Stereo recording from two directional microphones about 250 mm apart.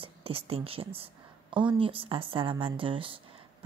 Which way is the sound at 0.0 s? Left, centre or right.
Right.